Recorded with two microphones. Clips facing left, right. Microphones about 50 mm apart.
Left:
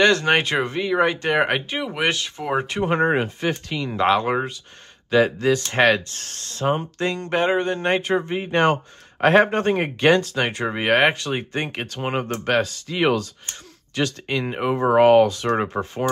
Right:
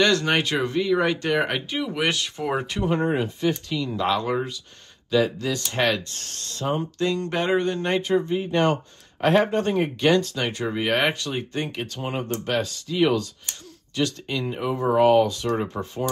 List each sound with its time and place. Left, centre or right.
0.0 s speech: left; by 2.6 s centre
2.6 s speech: left
2.9 s speech: left
11.9 s speech: left
12.4 s speech: left